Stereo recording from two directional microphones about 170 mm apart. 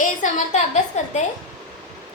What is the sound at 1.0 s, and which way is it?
Speech, 45° left (ahead or behind).